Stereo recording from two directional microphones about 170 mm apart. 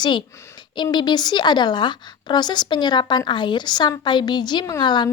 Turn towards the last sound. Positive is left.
turn(degrees=25)  # may be behind; listen again after turning